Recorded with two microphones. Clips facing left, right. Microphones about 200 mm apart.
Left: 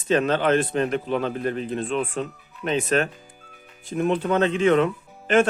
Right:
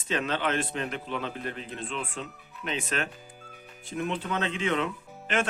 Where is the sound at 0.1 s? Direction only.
45° left (ahead or behind).